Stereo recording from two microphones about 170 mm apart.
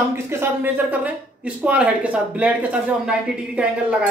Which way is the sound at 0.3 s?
15° right (ahead or behind).